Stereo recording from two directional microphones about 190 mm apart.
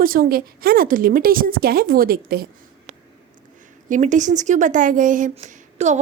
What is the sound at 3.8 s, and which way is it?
Speech, 40° right (ahead or behind).